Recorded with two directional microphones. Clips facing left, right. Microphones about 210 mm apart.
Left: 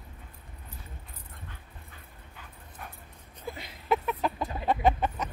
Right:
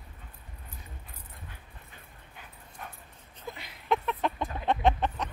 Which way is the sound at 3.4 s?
5° left (ahead or behind).